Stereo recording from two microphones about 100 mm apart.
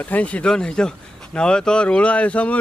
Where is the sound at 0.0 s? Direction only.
15° left (ahead or behind).